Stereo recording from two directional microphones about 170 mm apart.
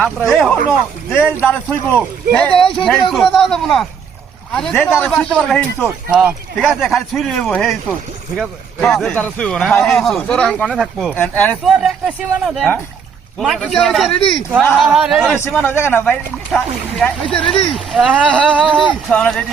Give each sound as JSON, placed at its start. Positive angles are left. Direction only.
{"t": 0.3, "sound": "a man's voice", "side_deg": 0}
{"t": 1.4, "sound": "a man's voice", "side_deg": 10}
{"t": 2.6, "sound": "speech", "side_deg": 30}
{"t": 2.8, "sound": "a man's voice", "side_deg": 5}
{"t": 6.1, "sound": "a man's voice", "side_deg": -5}
{"t": 11.6, "sound": "a man's voice", "side_deg": 0}
{"t": 14.2, "sound": "speech", "side_deg": 30}
{"t": 14.6, "sound": "a man's voice", "side_deg": 0}
{"t": 15.4, "sound": "a man's voice", "side_deg": 15}
{"t": 19.1, "sound": "a man's voice", "side_deg": 5}